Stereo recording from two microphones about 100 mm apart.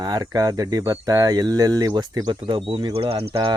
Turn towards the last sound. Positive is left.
turn(degrees=-70)  # may be behind; listen again after turning